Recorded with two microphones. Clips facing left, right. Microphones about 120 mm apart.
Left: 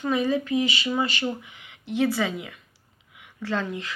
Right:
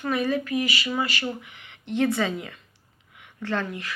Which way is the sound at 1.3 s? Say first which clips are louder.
Left 2 dB; 15° left (ahead or behind).